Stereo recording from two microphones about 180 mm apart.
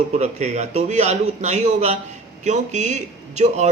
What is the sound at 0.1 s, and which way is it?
A man's voice, 40° right (ahead or behind).